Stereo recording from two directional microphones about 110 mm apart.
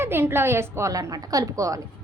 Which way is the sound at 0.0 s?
20° right (ahead or behind).